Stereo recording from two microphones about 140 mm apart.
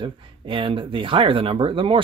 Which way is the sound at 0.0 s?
35° right (ahead or behind).